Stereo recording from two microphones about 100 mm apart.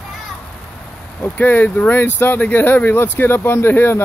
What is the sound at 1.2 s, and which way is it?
Speech, 20° left (ahead or behind).